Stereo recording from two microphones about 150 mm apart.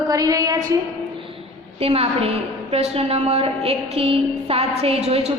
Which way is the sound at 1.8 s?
40° right (ahead or behind).